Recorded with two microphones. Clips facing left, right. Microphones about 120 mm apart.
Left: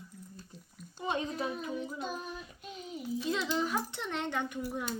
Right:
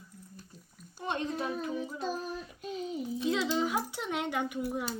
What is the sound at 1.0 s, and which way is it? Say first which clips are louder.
A child's voice: even; 5° left (ahead or behind).